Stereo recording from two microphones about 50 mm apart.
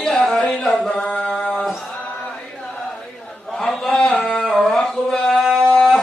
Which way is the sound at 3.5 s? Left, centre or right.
Centre.